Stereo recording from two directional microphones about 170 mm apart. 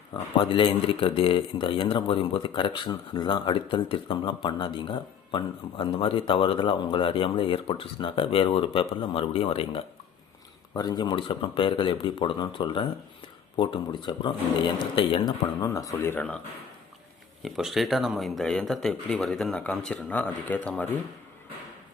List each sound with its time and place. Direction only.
0.1 s speech: 30° left (ahead or behind)
10.8 s speech: 25° left (ahead or behind)
17.4 s speech: centre (ahead or behind)